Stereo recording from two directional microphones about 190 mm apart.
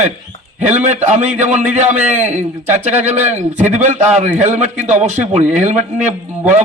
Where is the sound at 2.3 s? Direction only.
35° right (ahead or behind).